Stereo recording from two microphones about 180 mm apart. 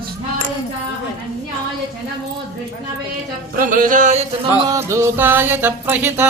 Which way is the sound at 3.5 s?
50° right (ahead or behind).